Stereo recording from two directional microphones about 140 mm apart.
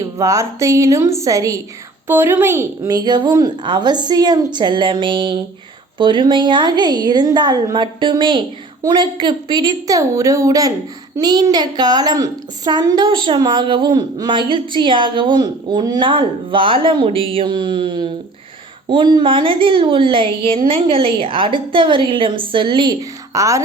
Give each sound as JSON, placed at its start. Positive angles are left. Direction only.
{"t": 0.0, "sound": "a woman's voice", "side_deg": -25}
{"t": 23.3, "sound": "a woman's voice", "side_deg": -20}